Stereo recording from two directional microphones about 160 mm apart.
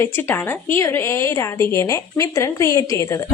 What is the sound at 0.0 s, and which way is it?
A woman's voice, 15° left (ahead or behind).